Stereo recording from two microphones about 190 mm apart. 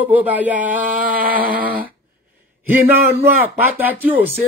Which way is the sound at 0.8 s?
50° right (ahead or behind).